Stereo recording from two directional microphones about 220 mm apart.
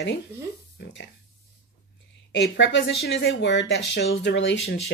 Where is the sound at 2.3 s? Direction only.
55° left (ahead or behind).